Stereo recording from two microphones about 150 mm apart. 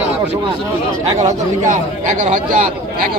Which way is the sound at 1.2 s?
55° right (ahead or behind).